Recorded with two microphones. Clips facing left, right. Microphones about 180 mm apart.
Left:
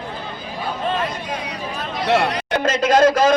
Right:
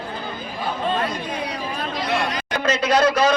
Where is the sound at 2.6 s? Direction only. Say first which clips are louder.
Left 3 dB; 50° left (ahead or behind).